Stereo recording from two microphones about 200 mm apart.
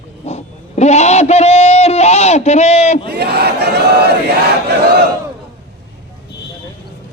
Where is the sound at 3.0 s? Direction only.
55° right (ahead or behind).